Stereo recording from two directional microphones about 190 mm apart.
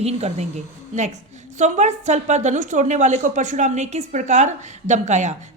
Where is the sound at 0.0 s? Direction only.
35° right (ahead or behind).